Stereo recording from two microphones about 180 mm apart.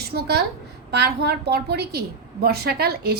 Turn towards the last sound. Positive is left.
turn(degrees=-60)  # may be behind; listen again after turning